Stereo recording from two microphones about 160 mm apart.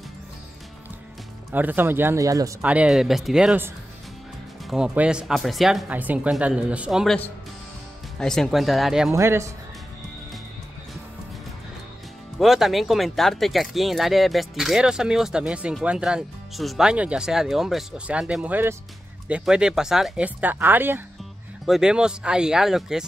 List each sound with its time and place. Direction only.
1.5 s speech: 10° right (ahead or behind)
2.6 s speech: 10° right (ahead or behind)
8.2 s speech: 5° left (ahead or behind)
9.1 s speech: 15° right (ahead or behind)
12.4 s speech: centre (ahead or behind)